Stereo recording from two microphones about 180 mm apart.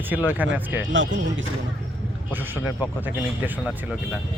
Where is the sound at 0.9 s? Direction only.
90° right.